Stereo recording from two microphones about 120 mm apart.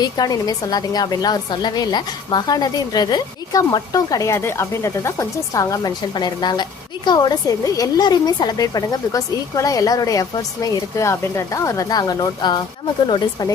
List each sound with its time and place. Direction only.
0.0 s a woman's voice: 30° left (ahead or behind)